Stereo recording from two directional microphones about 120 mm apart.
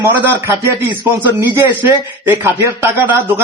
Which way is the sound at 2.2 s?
20° right (ahead or behind).